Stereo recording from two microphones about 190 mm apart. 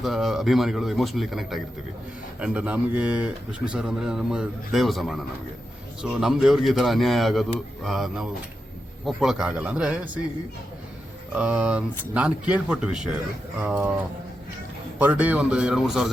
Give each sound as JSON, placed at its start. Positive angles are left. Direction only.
{"t": 0.0, "sound": "speech", "side_deg": 0}
{"t": 11.3, "sound": "speech", "side_deg": -5}